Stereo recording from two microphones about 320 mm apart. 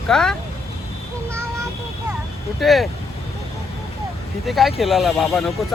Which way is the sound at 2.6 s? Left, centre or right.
Centre.